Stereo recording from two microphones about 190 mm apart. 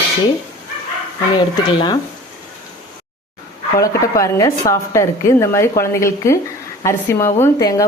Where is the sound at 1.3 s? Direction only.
25° left (ahead or behind).